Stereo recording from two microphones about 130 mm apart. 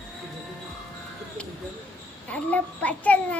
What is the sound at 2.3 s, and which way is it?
Child singing, 10° left (ahead or behind).